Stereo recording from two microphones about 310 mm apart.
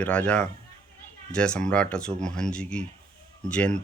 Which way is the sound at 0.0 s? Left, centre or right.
Centre.